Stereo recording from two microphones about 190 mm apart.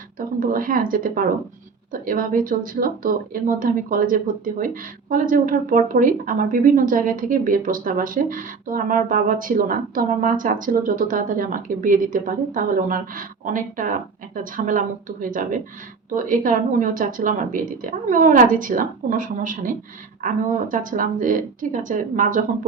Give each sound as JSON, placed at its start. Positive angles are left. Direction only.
{"t": 0.2, "sound": "speech", "side_deg": -45}